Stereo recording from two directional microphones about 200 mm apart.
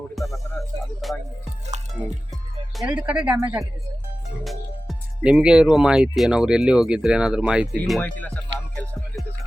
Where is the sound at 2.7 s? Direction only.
5° right (ahead or behind).